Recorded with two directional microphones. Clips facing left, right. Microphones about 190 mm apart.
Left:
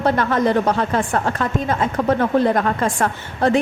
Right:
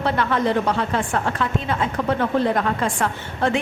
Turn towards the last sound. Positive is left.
turn(degrees=40)  # may be behind; listen again after turning